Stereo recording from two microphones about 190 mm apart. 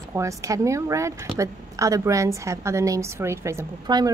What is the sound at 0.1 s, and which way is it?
A woman's voice, 15° right (ahead or behind).